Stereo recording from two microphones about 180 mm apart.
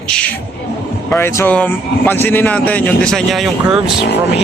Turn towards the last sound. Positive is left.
turn(degrees=0)  # may be behind; listen again after turning